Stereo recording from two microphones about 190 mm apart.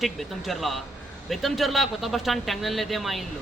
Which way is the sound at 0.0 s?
Centre (ahead or behind).